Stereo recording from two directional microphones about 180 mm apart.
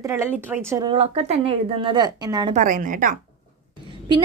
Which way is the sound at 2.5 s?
45° right (ahead or behind).